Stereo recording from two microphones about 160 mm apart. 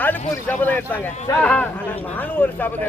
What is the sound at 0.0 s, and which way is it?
A man's voice, 10° left (ahead or behind).